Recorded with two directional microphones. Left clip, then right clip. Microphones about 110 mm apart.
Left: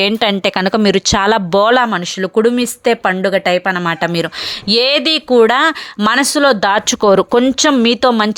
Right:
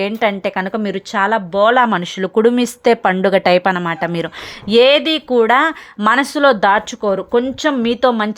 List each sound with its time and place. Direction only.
0.0 s speech: 30° left (ahead or behind)
0.7 s speech: 50° left (ahead or behind)
1.8 s speech: 5° left (ahead or behind)
3.2 s speech: 15° right (ahead or behind)
3.8 s speech: 5° left (ahead or behind)
7.0 s speech: 60° left (ahead or behind)
7.4 s speech: 40° left (ahead or behind)